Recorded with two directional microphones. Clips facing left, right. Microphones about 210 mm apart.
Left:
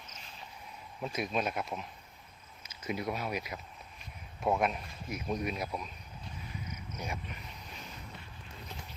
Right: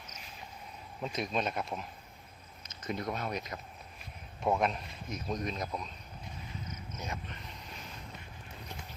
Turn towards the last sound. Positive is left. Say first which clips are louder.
# left 1 dB
turn(degrees=10)  # may be behind; listen again after turning